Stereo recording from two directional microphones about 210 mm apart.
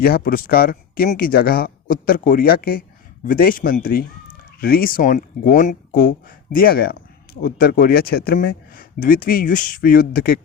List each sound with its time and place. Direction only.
0.0 s speech: 45° left (ahead or behind)